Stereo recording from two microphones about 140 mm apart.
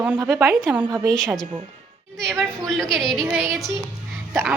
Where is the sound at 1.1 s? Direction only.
5° left (ahead or behind).